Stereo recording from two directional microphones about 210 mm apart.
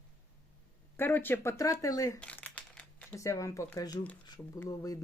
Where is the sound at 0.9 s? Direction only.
10° left (ahead or behind).